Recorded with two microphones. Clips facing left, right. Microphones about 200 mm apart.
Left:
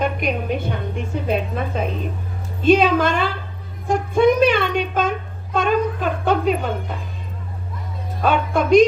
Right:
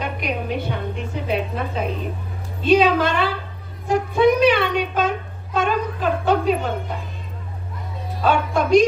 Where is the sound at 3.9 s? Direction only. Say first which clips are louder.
Left 1 dB; 50° left (ahead or behind).